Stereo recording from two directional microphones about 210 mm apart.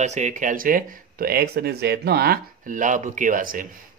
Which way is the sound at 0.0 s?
35° right (ahead or behind).